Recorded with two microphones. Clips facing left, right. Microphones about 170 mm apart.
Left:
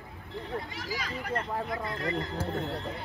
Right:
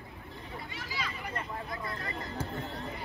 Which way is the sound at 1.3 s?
65° left (ahead or behind).